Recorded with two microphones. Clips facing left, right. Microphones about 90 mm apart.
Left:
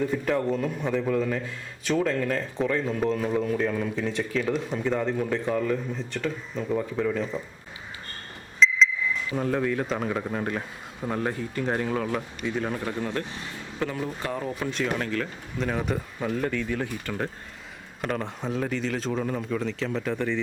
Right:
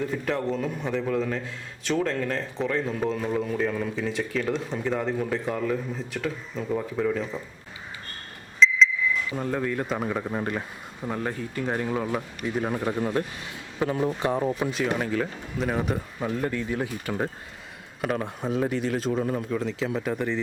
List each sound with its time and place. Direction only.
0.0 s a man's voice: centre (ahead or behind)
9.3 s a man's voice: centre (ahead or behind); by 14.7 s 20° right (ahead or behind)
14.7 s speech: 5° right (ahead or behind)
16.5 s a man's voice: 15° right (ahead or behind)